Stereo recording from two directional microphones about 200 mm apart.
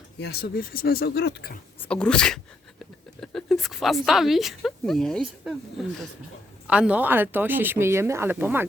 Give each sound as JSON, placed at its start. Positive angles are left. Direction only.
{"t": 0.2, "sound": "speech", "side_deg": 50}
{"t": 1.8, "sound": "speech", "side_deg": 5}